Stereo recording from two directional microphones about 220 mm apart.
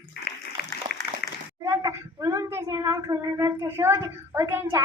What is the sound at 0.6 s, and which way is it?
Applause, 45° left (ahead or behind).